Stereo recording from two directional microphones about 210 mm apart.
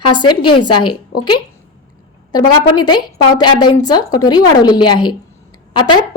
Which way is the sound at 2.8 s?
20° left (ahead or behind).